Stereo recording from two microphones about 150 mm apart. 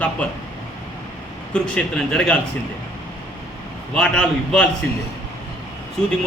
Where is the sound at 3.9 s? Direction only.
5° left (ahead or behind).